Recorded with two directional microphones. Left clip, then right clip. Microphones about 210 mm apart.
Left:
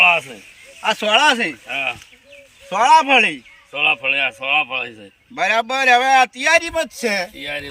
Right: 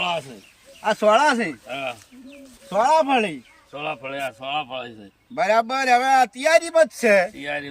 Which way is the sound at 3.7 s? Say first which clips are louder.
Left 12 dB; 25° left (ahead or behind).